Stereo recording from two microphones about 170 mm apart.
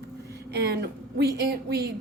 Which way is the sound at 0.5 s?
75° right (ahead or behind).